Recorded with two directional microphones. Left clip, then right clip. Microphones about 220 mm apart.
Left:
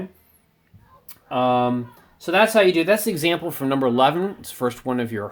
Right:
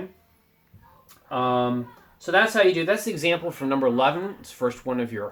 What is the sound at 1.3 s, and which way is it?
Speech, 40° left (ahead or behind).